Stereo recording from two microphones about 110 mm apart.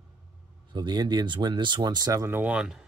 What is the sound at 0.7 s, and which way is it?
Speech, 40° right (ahead or behind).